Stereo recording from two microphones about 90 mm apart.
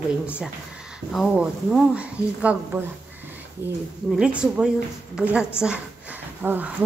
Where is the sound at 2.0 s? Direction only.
15° right (ahead or behind).